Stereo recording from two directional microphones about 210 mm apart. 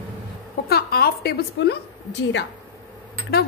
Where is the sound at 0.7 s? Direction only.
45° left (ahead or behind).